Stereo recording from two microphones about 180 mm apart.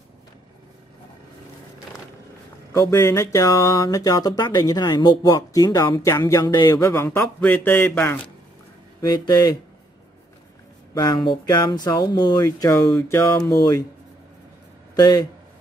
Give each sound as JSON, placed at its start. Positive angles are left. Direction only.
{"t": 2.7, "sound": "speech", "side_deg": 15}
{"t": 9.0, "sound": "speech", "side_deg": 20}
{"t": 11.0, "sound": "speech", "side_deg": 25}
{"t": 15.0, "sound": "speech", "side_deg": 20}